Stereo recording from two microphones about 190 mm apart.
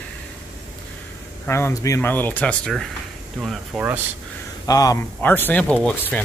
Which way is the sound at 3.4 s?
5° right (ahead or behind).